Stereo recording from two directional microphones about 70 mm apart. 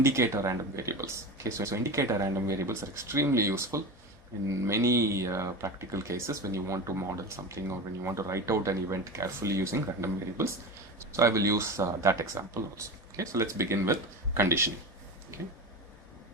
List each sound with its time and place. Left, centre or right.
0.0 s speech: right